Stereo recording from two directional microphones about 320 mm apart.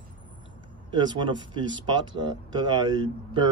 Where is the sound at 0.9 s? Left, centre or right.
Centre.